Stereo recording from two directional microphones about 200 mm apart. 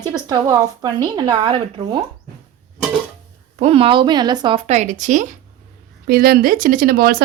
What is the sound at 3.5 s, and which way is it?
A woman's voice, 30° right (ahead or behind).